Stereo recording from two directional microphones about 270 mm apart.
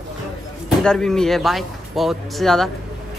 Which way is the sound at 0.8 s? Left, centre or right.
Centre.